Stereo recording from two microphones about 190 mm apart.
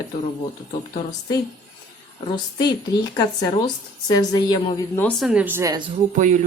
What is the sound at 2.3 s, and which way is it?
A woman's voice, 20° left (ahead or behind).